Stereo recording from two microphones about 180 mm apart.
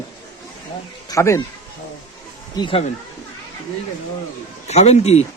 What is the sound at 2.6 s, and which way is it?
Speech, 30° left (ahead or behind).